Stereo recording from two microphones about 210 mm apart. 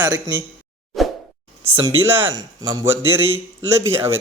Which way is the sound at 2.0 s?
10° right (ahead or behind).